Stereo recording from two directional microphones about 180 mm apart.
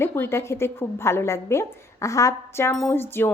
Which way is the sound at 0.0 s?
15° left (ahead or behind).